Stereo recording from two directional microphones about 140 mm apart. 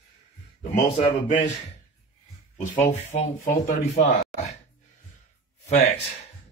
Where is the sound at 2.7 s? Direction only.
50° left (ahead or behind).